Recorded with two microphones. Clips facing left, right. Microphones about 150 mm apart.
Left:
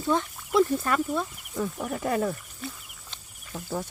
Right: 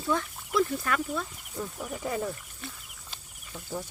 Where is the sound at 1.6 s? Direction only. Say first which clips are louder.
Left 5 dB; 65° left (ahead or behind).